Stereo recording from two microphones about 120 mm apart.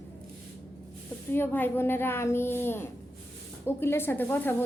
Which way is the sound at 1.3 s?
20° left (ahead or behind).